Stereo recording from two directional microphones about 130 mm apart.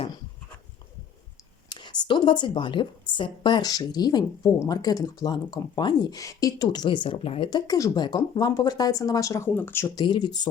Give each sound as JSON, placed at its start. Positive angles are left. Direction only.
{"t": 1.7, "sound": "a woman's voice", "side_deg": 35}
{"t": 6.8, "sound": "a woman's voice", "side_deg": 40}
{"t": 7.7, "sound": "speech", "side_deg": 30}
{"t": 9.9, "sound": "a woman's voice", "side_deg": 30}